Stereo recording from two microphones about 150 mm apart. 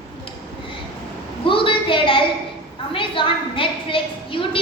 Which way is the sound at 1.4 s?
35° left (ahead or behind).